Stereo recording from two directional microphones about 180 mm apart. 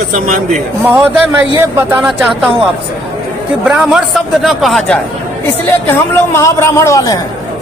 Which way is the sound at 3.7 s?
5° right (ahead or behind).